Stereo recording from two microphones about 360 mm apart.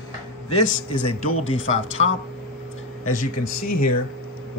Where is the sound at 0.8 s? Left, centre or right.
Left.